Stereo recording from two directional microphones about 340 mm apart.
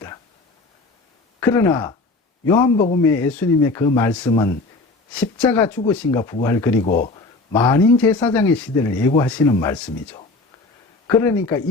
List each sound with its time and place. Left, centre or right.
1.4 s a man's voice: centre
6.8 s speech: left
7.5 s a man's voice: centre